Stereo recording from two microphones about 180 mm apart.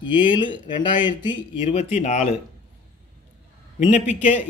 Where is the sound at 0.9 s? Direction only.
25° left (ahead or behind); by 2.2 s 40° left (ahead or behind).